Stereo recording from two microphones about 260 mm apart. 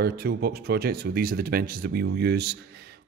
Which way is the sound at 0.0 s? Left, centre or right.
Right.